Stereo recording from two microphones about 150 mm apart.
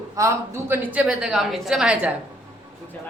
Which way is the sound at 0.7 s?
10° right (ahead or behind).